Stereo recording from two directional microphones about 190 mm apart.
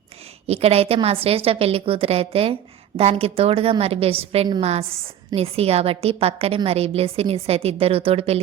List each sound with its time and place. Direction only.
0.4 s a woman's voice: 35° right (ahead or behind)